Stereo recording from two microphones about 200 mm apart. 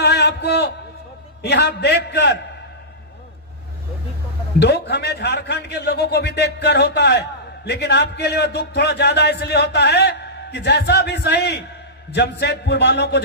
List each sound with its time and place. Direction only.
0.0 s mantra: 55° left (ahead or behind)
1.4 s a man's voice: 55° left (ahead or behind)
4.6 s a man's voice: 55° left (ahead or behind)